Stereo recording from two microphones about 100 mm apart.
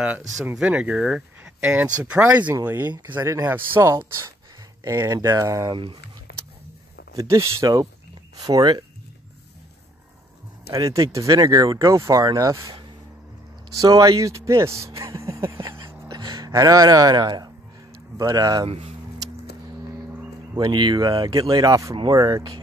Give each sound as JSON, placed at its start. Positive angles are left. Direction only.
{"t": 0.0, "sound": "speech", "side_deg": -15}
{"t": 4.8, "sound": "speech", "side_deg": -30}
{"t": 7.2, "sound": "speech", "side_deg": -30}
{"t": 10.7, "sound": "speech", "side_deg": -35}
{"t": 13.7, "sound": "speech", "side_deg": -35}
{"t": 18.7, "sound": "speech", "side_deg": -80}
{"t": 20.5, "sound": "speech", "side_deg": -45}